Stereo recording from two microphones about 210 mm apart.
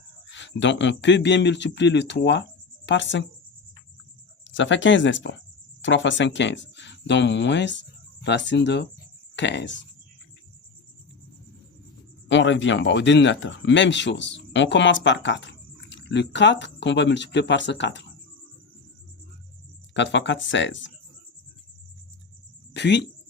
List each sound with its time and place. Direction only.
0.3 s speech: 60° left (ahead or behind)
4.4 s speech: 60° left (ahead or behind)
12.3 s speech: 60° left (ahead or behind)
19.9 s speech: 60° left (ahead or behind)
22.7 s speech: 55° left (ahead or behind)